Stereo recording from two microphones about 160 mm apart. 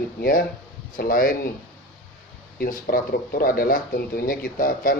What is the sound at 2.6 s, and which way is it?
Speech, 65° left (ahead or behind).